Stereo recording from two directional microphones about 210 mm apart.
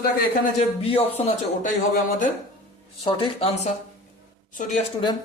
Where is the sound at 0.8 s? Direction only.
30° left (ahead or behind).